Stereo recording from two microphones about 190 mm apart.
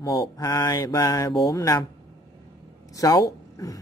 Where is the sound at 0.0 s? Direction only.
20° left (ahead or behind).